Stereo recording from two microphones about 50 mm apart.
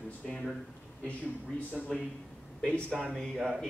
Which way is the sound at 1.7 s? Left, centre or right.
Centre.